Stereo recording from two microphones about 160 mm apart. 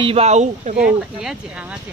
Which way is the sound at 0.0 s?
40° right (ahead or behind).